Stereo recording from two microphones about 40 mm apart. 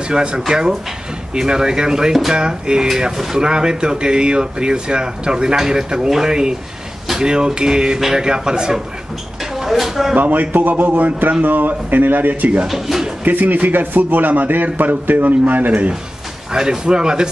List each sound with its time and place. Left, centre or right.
0.1 s speech: right
2.9 s speech: centre
9.6 s speech: centre
10.1 s a man's voice: right
12.6 s speech: centre
13.2 s a man's voice: right
16.5 s speech: centre